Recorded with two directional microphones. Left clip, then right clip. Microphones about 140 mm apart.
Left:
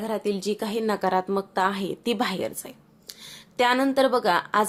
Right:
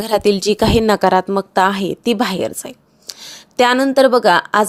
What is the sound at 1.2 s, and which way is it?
A woman's voice, 55° right (ahead or behind).